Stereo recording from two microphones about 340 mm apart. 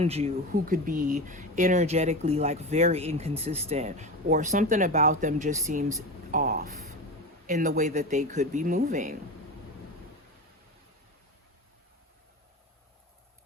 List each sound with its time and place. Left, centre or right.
0.0 s speech: centre